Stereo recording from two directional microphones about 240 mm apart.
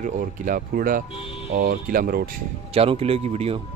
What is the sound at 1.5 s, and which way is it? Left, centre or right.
Speech, right.